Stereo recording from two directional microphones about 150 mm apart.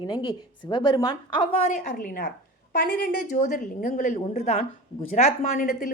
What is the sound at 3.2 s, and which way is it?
A woman's voice, 55° left (ahead or behind).